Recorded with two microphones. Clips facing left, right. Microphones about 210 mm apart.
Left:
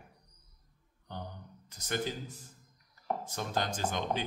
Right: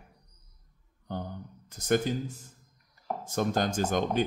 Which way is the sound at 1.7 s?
50° right (ahead or behind).